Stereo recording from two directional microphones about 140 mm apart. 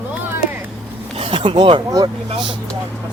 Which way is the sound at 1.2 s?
40° right (ahead or behind).